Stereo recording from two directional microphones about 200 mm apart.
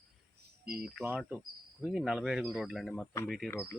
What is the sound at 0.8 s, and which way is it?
Speech, 5° right (ahead or behind).